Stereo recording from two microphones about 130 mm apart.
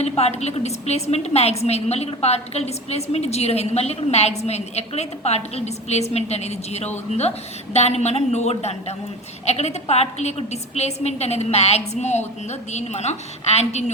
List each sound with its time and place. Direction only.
0.0 s a woman's voice: 55° left (ahead or behind)